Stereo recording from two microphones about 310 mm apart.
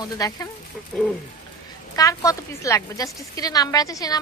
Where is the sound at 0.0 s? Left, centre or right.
Centre.